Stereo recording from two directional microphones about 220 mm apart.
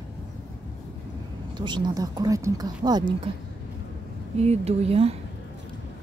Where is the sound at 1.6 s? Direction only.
20° right (ahead or behind).